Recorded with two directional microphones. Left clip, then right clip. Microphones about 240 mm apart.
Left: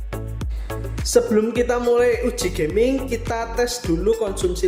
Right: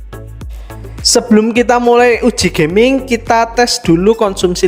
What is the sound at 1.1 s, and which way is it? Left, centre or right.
Speech, right.